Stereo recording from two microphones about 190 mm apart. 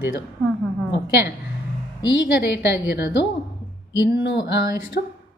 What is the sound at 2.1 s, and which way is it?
A woman's voice, 70° left (ahead or behind).